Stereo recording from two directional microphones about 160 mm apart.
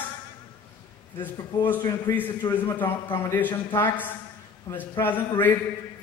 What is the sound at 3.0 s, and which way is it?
Speech, 10° left (ahead or behind).